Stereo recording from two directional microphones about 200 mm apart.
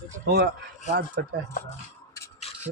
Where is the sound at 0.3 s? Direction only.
55° right (ahead or behind).